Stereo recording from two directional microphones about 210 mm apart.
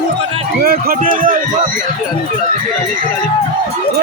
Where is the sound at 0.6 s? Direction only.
45° right (ahead or behind).